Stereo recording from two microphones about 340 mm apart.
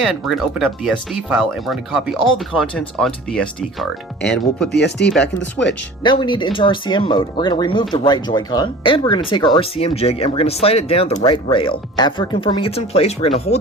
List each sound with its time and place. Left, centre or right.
0.0 s speech: centre
4.7 s speech: left
6.0 s speech: centre